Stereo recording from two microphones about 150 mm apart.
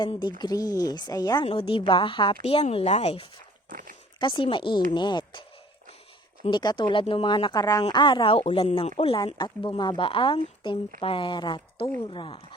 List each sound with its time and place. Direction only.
0.0 s a woman's voice: 30° left (ahead or behind)
1.5 s speech: 40° left (ahead or behind)
3.7 s speech: 60° right (ahead or behind)
4.2 s speech: 35° left (ahead or behind)
6.5 s speech: 30° left (ahead or behind)